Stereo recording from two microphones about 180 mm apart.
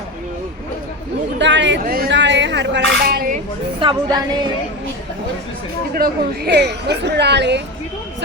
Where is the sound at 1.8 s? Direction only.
55° right (ahead or behind).